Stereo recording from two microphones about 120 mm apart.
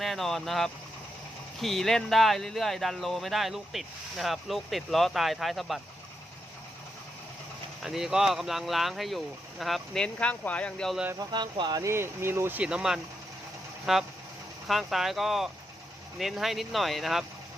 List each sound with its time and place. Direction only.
0.0 s speech: centre (ahead or behind)
7.8 s speech: 5° right (ahead or behind)
11.2 s speech: 40° right (ahead or behind)
11.8 s speech: 20° right (ahead or behind); by 17.2 s centre (ahead or behind)